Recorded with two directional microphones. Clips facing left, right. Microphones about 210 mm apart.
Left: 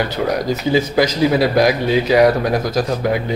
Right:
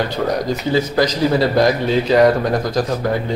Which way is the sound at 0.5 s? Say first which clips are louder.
Left 1 dB; 10° left (ahead or behind).